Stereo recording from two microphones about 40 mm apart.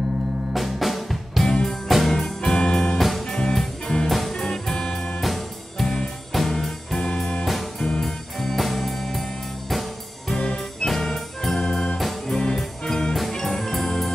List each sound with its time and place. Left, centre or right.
0.5 s music: centre
1.5 s music: centre
1.9 s music: centre
3.0 s music: centre
3.3 s music: centre
5.2 s music: centre
10.3 s music: left
10.9 s music: centre
11.6 s music: left